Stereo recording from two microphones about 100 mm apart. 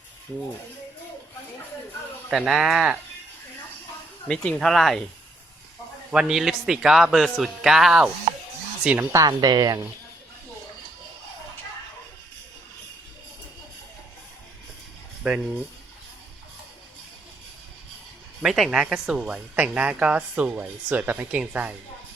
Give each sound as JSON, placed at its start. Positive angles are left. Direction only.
{"t": 2.3, "sound": "speech", "side_deg": 0}
{"t": 4.3, "sound": "speech", "side_deg": 5}
{"t": 6.1, "sound": "speech", "side_deg": -5}
{"t": 9.2, "sound": "speech", "side_deg": -45}
{"t": 15.2, "sound": "speech", "side_deg": -5}
{"t": 18.4, "sound": "speech", "side_deg": -5}